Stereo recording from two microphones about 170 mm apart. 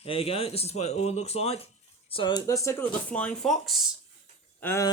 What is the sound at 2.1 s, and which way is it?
Speech, 25° left (ahead or behind).